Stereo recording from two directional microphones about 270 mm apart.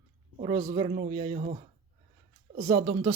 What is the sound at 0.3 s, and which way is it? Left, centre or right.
Speech, right.